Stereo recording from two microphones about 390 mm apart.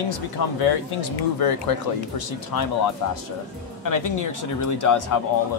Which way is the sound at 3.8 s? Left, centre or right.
Left.